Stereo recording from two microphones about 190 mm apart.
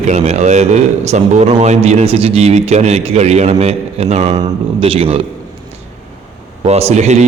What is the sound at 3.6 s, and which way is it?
Mantra, 35° right (ahead or behind).